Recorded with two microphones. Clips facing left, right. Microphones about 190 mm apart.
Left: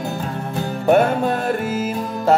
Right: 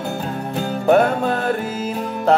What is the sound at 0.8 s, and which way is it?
Music, centre (ahead or behind).